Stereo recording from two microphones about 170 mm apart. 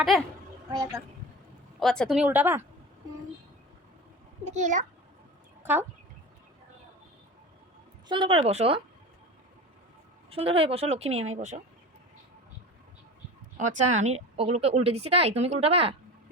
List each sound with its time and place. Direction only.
0.1 s a child's voice: centre (ahead or behind)
0.7 s speech: 20° right (ahead or behind)
1.8 s speech: centre (ahead or behind)
4.4 s a child's voice: 45° right (ahead or behind)
8.0 s speech: 30° right (ahead or behind)
10.2 s speech: 35° right (ahead or behind)
13.6 s speech: 45° right (ahead or behind)